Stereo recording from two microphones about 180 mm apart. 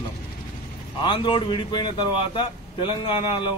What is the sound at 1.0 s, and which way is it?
A man's voice, 25° left (ahead or behind).